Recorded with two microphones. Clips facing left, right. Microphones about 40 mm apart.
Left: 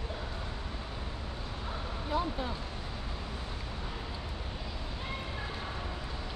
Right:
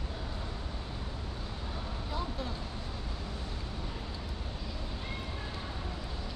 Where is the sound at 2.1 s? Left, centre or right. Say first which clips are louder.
Left 6 dB; left.